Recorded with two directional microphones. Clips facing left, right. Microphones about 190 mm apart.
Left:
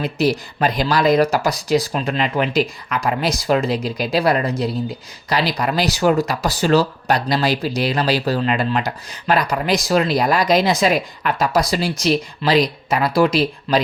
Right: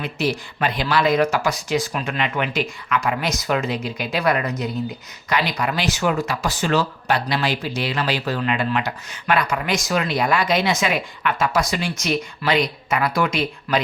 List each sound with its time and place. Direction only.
0.0 s speech: 35° left (ahead or behind)